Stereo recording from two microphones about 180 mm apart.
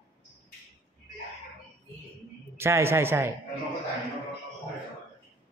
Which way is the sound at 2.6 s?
15° right (ahead or behind).